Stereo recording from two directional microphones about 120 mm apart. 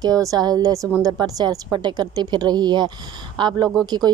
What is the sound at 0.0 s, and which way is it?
A woman's voice, 30° right (ahead or behind).